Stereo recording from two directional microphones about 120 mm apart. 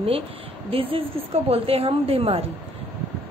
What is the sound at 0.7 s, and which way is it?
A woman's voice, 50° right (ahead or behind).